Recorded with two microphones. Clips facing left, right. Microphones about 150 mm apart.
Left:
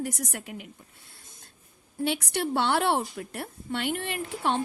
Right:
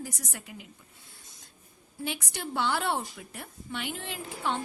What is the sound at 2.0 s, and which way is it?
A woman's voice, 65° left (ahead or behind).